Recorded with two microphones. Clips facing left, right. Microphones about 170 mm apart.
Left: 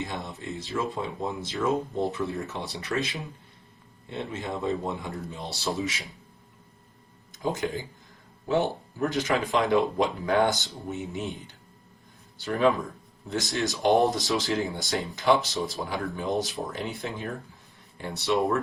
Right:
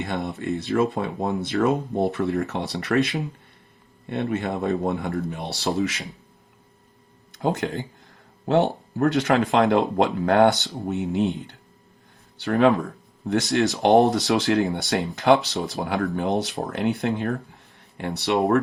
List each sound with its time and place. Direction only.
0.0 s speech: 65° right (ahead or behind)
7.3 s speech: 65° right (ahead or behind)
12.4 s speech: 65° right (ahead or behind)